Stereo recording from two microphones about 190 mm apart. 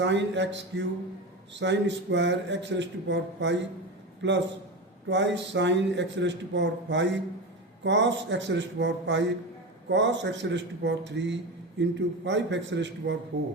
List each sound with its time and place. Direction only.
0.0 s a man's voice: 70° right (ahead or behind)